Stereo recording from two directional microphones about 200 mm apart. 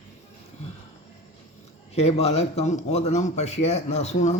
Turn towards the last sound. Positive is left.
turn(degrees=35)  # may be behind; listen again after turning